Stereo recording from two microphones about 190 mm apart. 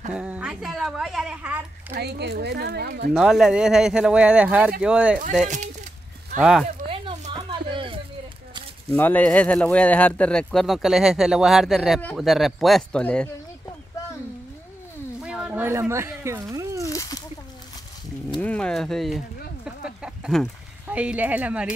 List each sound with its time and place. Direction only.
0.1 s a woman's voice: 5° right (ahead or behind)
2.0 s speech: 60° right (ahead or behind)
3.1 s speech: centre (ahead or behind)
6.9 s a sound: 30° right (ahead or behind)
8.9 s speech: 10° left (ahead or behind)
15.2 s a sound: 5° right (ahead or behind)
16.9 s splash: 15° left (ahead or behind)
18.4 s a sound: 5° left (ahead or behind)
20.9 s speech: 5° right (ahead or behind)